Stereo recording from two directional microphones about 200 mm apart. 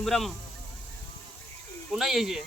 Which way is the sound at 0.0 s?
Centre (ahead or behind).